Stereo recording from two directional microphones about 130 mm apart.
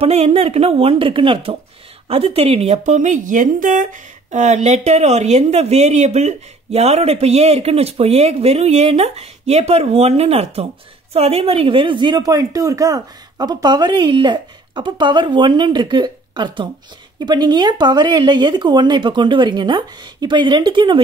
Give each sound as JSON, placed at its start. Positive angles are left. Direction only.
{"t": 0.0, "sound": "speech", "side_deg": -50}